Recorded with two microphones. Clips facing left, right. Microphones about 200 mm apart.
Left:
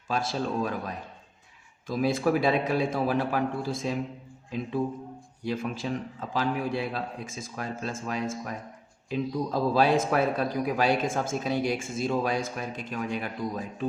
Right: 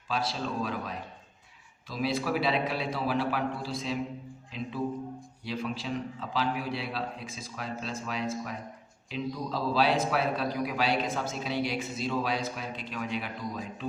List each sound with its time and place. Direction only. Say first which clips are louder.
0.1 s a man's voice: left 3 dB; 50° left (ahead or behind)
1.9 s a man's voice: left 5 dB; 50° left (ahead or behind)